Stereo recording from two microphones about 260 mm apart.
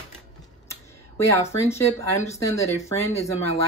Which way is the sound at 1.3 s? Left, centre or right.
Centre.